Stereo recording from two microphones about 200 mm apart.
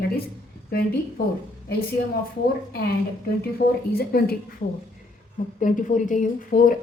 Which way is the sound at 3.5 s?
50° left (ahead or behind).